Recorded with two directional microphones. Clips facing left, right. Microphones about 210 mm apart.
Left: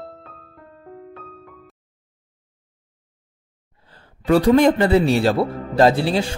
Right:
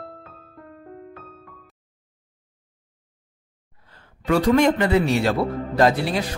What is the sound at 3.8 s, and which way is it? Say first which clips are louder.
Speech: left 4 dB; 30° left (ahead or behind).